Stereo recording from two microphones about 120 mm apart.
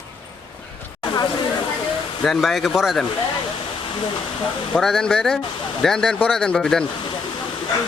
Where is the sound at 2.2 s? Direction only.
Centre (ahead or behind).